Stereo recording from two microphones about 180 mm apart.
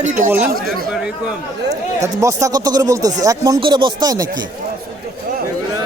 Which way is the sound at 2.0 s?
15° right (ahead or behind).